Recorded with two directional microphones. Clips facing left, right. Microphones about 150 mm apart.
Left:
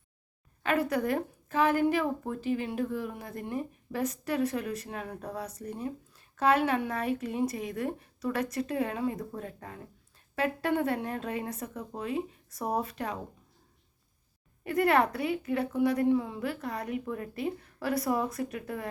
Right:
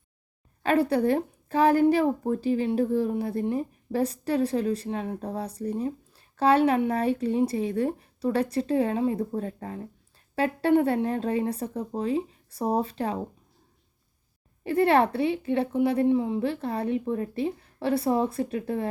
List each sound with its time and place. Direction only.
0.6 s a woman's voice: 35° right (ahead or behind)
14.6 s a woman's voice: 30° right (ahead or behind)